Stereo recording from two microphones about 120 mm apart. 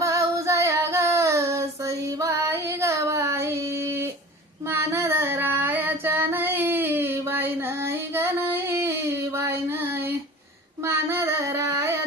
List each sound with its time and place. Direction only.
0.0 s child singing: 25° right (ahead or behind)